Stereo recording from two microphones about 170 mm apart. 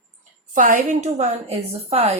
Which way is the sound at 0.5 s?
50° right (ahead or behind).